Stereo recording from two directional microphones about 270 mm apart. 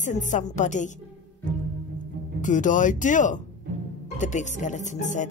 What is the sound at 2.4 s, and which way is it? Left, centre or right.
Speech, left.